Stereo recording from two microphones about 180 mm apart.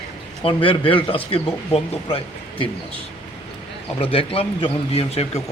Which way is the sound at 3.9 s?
30° left (ahead or behind).